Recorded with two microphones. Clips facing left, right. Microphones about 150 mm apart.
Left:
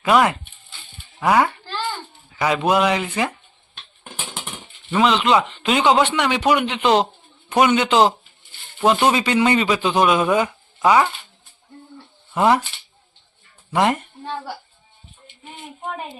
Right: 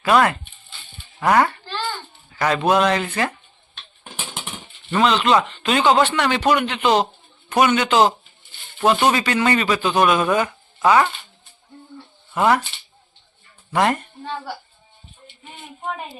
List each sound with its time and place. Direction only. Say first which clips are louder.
0.0 s a man's voice: even; 20° left (ahead or behind)
4.9 s a man's voice: even; 10° left (ahead or behind)
11.9 s a sound: left 1 dB; 20° left (ahead or behind)
13.7 s speech: even; 15° left (ahead or behind)